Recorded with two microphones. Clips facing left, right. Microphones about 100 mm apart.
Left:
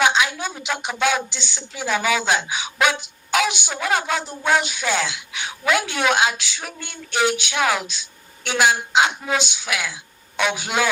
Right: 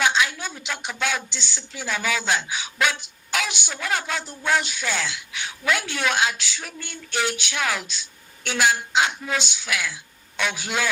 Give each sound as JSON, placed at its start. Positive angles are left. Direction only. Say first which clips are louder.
{"t": 0.0, "sound": "a woman's voice", "louder": "left 3 dB", "side_deg": 15}